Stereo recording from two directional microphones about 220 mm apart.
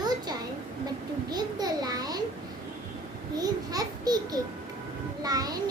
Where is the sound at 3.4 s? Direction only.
15° right (ahead or behind).